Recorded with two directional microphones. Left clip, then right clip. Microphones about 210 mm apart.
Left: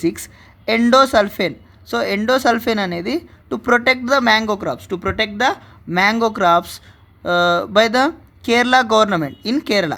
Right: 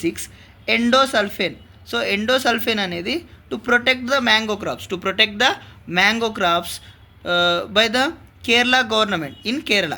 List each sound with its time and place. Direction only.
0.0 s a woman's voice: 60° left (ahead or behind)